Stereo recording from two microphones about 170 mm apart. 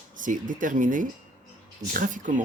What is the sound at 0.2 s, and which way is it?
Speech, 50° right (ahead or behind).